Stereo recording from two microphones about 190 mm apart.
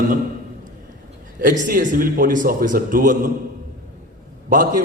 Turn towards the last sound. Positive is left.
turn(degrees=-45)  # may be behind; listen again after turning